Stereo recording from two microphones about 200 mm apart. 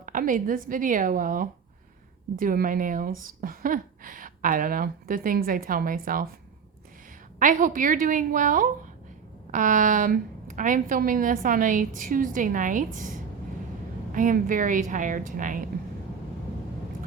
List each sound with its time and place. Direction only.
0.0 s a woman's voice: 40° right (ahead or behind)
7.3 s a woman's voice: 40° right (ahead or behind)